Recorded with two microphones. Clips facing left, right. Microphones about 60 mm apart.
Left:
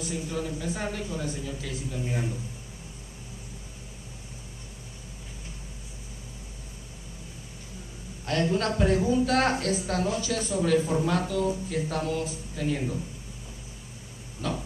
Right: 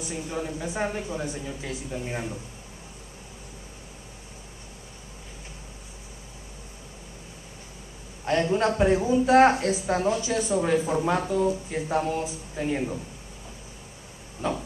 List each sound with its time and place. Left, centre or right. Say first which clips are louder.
0.0 s speech: even; right
8.3 s speech: right 3 dB; right
14.4 s speech: right 3 dB; right